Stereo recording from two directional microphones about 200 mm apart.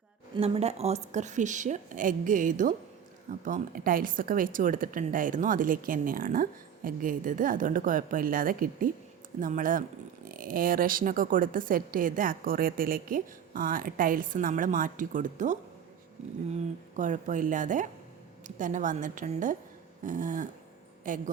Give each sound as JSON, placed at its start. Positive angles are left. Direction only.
{"t": 0.3, "sound": "a woman's voice", "side_deg": -30}